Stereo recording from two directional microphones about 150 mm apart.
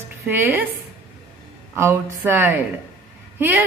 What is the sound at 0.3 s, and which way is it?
Speech, 10° right (ahead or behind).